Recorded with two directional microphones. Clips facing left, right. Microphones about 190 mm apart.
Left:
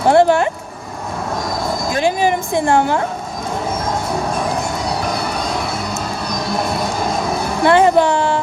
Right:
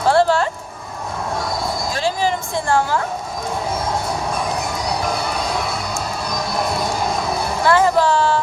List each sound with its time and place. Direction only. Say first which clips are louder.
0.1 s speech: left 4 dB; 20° left (ahead or behind)
1.9 s a woman's voice: left 5 dB; 15° left (ahead or behind)
7.6 s music: left 4 dB; 20° left (ahead or behind)